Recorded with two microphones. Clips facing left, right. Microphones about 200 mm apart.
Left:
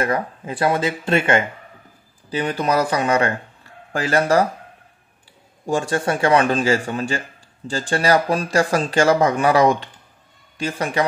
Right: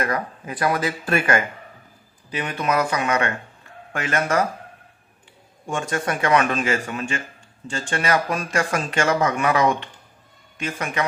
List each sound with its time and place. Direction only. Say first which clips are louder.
0.0 s a man's voice: left 3 dB; 30° left (ahead or behind)
5.7 s a man's voice: left 5 dB; 30° left (ahead or behind)